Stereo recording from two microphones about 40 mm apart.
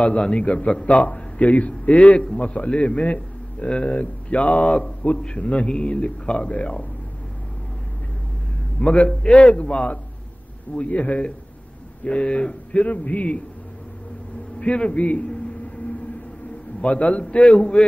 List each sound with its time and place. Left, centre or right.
0.2 s a man's voice: left
8.8 s a man's voice: left
14.6 s a man's voice: left
16.8 s a man's voice: left